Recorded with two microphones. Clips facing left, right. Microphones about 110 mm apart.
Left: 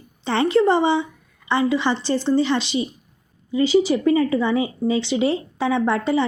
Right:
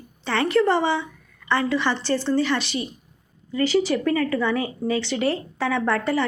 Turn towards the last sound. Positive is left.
turn(degrees=15)  # may be behind; listen again after turning